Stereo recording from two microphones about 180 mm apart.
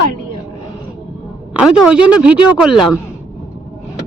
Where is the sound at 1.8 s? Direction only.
5° right (ahead or behind).